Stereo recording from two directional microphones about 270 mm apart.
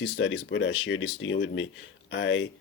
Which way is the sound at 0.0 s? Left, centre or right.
Left.